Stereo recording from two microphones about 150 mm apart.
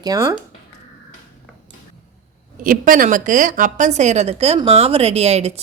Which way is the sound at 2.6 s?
65° right (ahead or behind).